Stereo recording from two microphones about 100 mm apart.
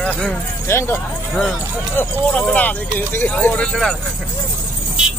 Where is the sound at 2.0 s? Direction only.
10° left (ahead or behind).